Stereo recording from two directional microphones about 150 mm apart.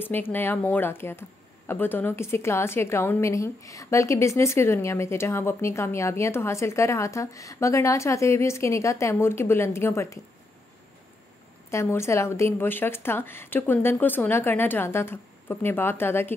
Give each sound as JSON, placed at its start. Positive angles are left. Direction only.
{"t": 0.0, "sound": "a woman's voice", "side_deg": 15}
{"t": 11.7, "sound": "a woman's voice", "side_deg": 15}